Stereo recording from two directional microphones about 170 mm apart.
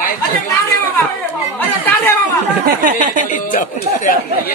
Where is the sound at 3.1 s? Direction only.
50° left (ahead or behind).